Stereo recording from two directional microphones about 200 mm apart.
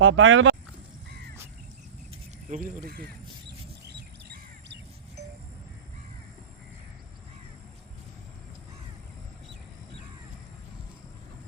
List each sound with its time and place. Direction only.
0.0 s speech: 75° right (ahead or behind)
2.5 s speech: 40° right (ahead or behind)
2.8 s bird: 50° right (ahead or behind)